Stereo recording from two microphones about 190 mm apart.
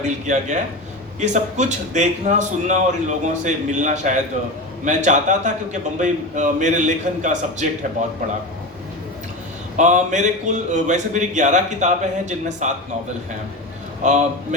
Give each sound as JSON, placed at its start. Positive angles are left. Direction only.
{"t": 0.3, "sound": "speech", "side_deg": -40}
{"t": 9.7, "sound": "speech", "side_deg": -40}
{"t": 14.0, "sound": "speech", "side_deg": -40}